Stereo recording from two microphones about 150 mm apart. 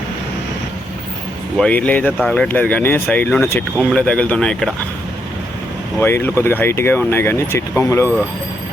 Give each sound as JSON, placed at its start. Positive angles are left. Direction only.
{"t": 1.5, "sound": "speech", "side_deg": 5}
{"t": 6.0, "sound": "speech", "side_deg": 15}